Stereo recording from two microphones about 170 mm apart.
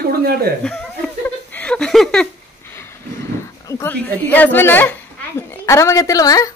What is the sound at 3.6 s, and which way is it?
A woman's voice, 15° left (ahead or behind).